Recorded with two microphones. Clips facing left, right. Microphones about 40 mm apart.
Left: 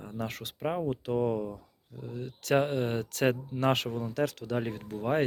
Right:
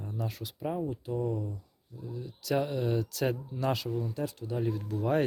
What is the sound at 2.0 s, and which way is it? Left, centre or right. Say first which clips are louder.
Speech: left 2 dB; left.